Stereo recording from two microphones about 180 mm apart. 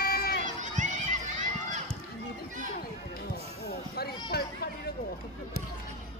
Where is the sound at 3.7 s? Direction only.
60° left (ahead or behind).